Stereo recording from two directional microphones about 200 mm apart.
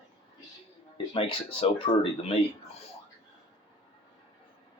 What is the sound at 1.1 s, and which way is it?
Speech, 25° left (ahead or behind).